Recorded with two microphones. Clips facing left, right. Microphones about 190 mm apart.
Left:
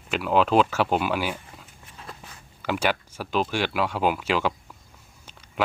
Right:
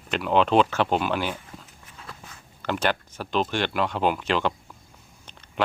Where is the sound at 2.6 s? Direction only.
10° left (ahead or behind).